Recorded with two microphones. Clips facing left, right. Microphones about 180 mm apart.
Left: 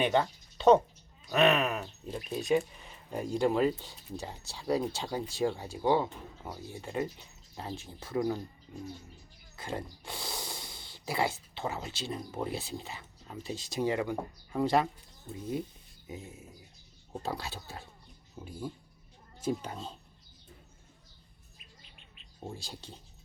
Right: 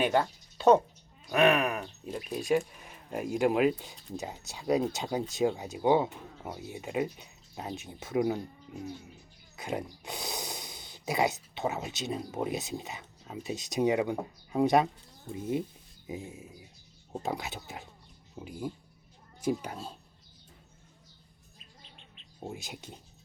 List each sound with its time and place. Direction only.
0.0 s speech: 5° right (ahead or behind)
9.6 s speech: 20° right (ahead or behind)
13.2 s speech: 5° right (ahead or behind)
13.7 s speech: 20° right (ahead or behind)
22.4 s speech: 20° right (ahead or behind)